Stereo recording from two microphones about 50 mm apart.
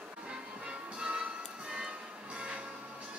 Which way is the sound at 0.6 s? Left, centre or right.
Right.